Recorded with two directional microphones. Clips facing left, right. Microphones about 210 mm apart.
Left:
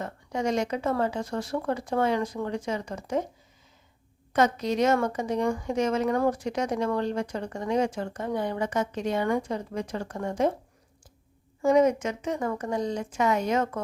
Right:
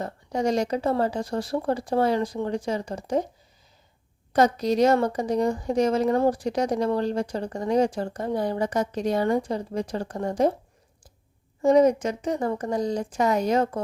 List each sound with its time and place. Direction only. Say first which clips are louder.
0.0 s a woman's voice: right 3 dB; 35° right (ahead or behind)
4.3 s a woman's voice: right 3 dB; 35° right (ahead or behind)
11.6 s a woman's voice: right 3 dB; 35° right (ahead or behind)